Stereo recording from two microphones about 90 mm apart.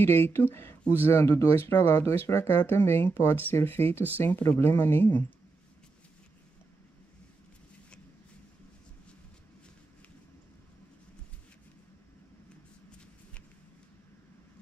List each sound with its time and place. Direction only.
0.0 s speech: 25° left (ahead or behind)